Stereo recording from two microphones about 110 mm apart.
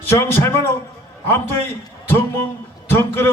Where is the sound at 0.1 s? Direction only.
20° left (ahead or behind).